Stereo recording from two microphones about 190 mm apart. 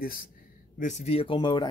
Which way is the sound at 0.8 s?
40° left (ahead or behind).